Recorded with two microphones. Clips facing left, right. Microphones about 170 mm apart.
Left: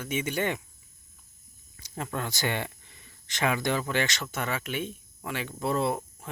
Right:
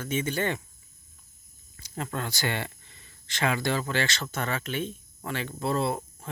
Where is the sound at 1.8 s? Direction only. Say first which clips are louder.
Even; 20° left (ahead or behind).